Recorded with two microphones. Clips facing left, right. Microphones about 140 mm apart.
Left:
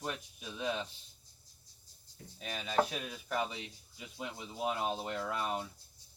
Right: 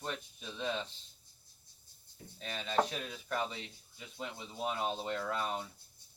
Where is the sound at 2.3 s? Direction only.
5° left (ahead or behind).